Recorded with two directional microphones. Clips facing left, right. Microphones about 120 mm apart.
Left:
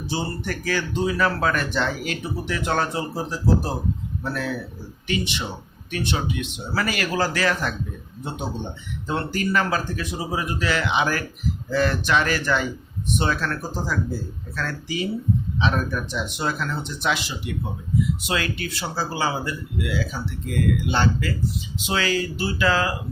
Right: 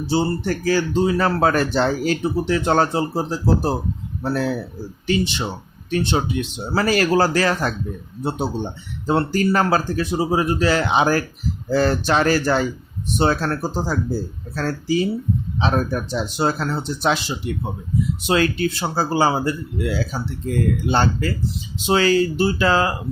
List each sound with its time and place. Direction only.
0.1 s speech: 30° right (ahead or behind)